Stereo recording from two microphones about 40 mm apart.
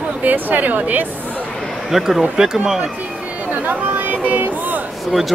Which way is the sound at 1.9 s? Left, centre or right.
Centre.